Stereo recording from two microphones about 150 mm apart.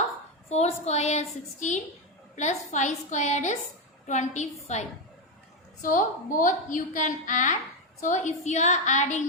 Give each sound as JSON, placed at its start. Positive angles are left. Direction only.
{"t": 0.5, "sound": "a woman's voice", "side_deg": 45}
{"t": 5.8, "sound": "a woman's voice", "side_deg": 60}